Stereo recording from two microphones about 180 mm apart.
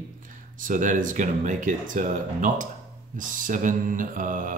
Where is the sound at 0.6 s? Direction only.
45° right (ahead or behind).